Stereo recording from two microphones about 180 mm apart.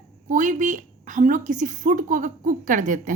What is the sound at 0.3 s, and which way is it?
A woman's voice, 45° right (ahead or behind).